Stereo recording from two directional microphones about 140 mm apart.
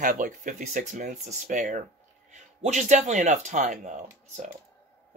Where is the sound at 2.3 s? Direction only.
60° right (ahead or behind).